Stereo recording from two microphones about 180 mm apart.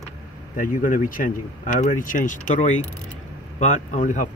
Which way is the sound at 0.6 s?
50° left (ahead or behind).